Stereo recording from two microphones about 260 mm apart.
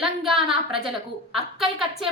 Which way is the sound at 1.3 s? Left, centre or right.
Centre.